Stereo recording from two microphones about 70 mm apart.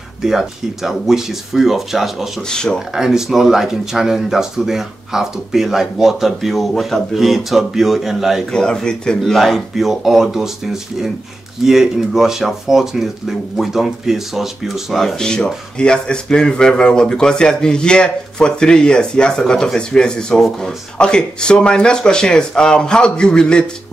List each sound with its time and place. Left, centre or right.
0.2 s speech: centre
2.4 s speech: centre
2.9 s speech: centre
8.5 s speech: centre
9.2 s speech: centre